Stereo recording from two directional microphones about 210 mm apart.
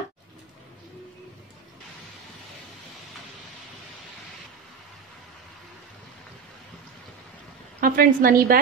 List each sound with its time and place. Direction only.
7.8 s a woman's voice: 40° right (ahead or behind)